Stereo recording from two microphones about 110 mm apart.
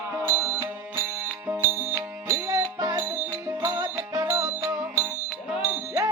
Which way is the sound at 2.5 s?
35° right (ahead or behind).